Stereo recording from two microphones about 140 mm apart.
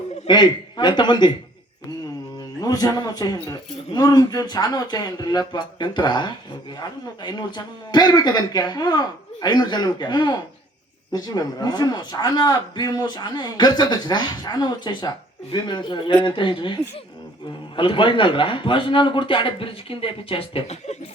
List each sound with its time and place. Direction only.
0.3 s a man's voice: 30° left (ahead or behind)
2.6 s a man's voice: 25° left (ahead or behind)
17.7 s a man's voice: 35° left (ahead or behind)